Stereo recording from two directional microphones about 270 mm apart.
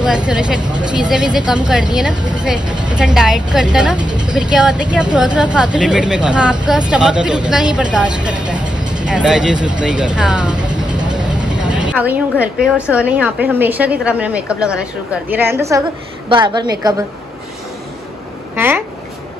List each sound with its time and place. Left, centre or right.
0.0 s a woman's voice: centre
2.6 s a woman's voice: centre
3.0 s a woman's voice: centre
4.0 s a woman's voice: centre
4.3 s a woman's voice: centre
8.5 s vehicle: centre
9.0 s a woman's voice: centre
10.6 s vehicle: centre
11.5 s a sound: centre
12.9 s a woman's voice: centre
18.6 s a woman's voice: centre